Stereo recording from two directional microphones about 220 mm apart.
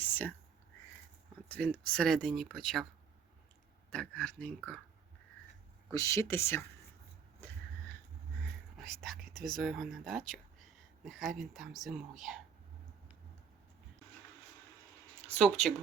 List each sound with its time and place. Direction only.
0.0 s whispering: 10° left (ahead or behind)
1.5 s speech: 5° left (ahead or behind)
3.9 s speech: 5° left (ahead or behind)
5.9 s speech: 15° left (ahead or behind)
8.9 s speech: centre (ahead or behind)
9.3 s speech: 40° right (ahead or behind)
9.6 s speech: centre (ahead or behind)
15.4 s speech: centre (ahead or behind)